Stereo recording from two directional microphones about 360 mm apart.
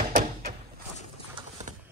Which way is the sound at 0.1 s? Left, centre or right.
Right.